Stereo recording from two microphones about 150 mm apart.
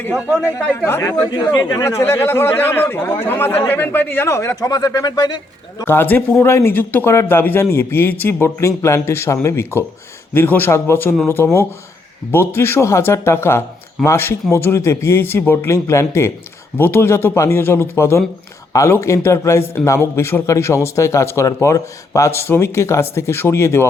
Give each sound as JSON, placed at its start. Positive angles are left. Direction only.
{"t": 0.4, "sound": "a man's voice", "side_deg": 10}
{"t": 1.3, "sound": "a man's voice", "side_deg": 30}
{"t": 5.8, "sound": "a man's voice", "side_deg": 15}